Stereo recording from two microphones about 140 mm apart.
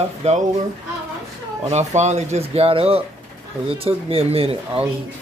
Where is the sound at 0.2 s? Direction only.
55° right (ahead or behind).